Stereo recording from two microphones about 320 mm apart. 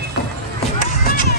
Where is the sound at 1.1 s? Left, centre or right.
Left.